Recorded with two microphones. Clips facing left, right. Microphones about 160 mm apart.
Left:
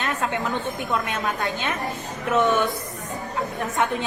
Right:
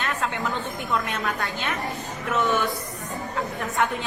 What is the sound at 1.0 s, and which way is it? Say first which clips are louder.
Speech: left 2 dB; 20° left (ahead or behind).